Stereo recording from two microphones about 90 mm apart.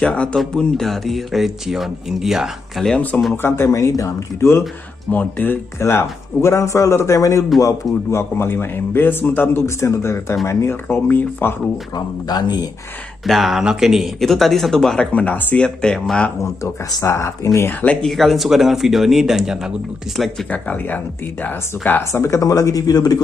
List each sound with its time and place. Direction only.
0.0 s speech: 10° left (ahead or behind); by 2.9 s 5° right (ahead or behind)
3.1 s speech: 15° left (ahead or behind)
3.4 s a man's voice: 30° left (ahead or behind)
5.1 s a man's voice: 20° left (ahead or behind)
11.9 s speech: 50° left (ahead or behind)
13.2 s speech: centre (ahead or behind)
16.3 s speech: 30° left (ahead or behind)
18.0 s speech: centre (ahead or behind)
20.4 s speech: 20° left (ahead or behind); by 23.2 s 45° left (ahead or behind)